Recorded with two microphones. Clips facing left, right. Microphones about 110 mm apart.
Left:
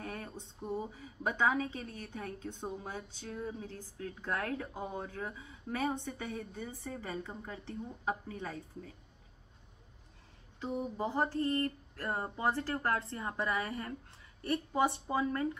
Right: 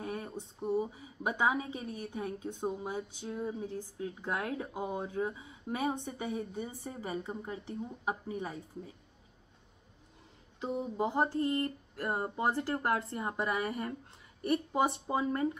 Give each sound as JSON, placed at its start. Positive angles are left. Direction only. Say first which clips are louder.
{"t": 0.0, "sound": "a sound", "louder": "right 4 dB", "side_deg": -25}
{"t": 0.6, "sound": "a woman's voice", "louder": "right 6 dB", "side_deg": -10}
{"t": 10.6, "sound": "a woman's voice", "louder": "right 3 dB", "side_deg": -15}